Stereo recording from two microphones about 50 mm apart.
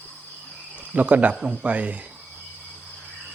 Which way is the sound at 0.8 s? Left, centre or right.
Right.